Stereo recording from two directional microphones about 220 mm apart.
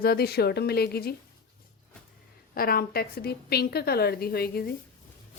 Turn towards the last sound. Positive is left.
turn(degrees=45)  # may be behind; listen again after turning